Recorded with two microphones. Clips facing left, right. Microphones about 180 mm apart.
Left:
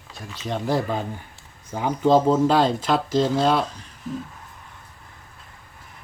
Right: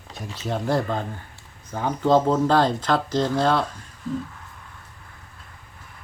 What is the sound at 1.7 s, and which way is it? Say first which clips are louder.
Speech: left 1 dB; 15° left (ahead or behind).